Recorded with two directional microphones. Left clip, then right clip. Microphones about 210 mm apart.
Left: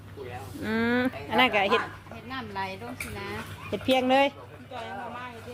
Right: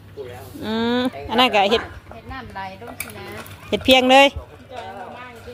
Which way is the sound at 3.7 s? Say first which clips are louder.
Right 10 dB; 30° right (ahead or behind).